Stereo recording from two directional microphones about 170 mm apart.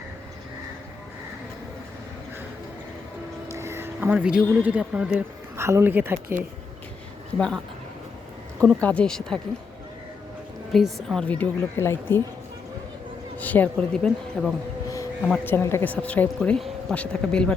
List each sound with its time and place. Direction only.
3.5 s speech: 15° right (ahead or behind)
7.3 s speech: 5° left (ahead or behind)
8.6 s speech: 10° left (ahead or behind)
10.7 s speech: centre (ahead or behind)
13.4 s speech: 10° left (ahead or behind)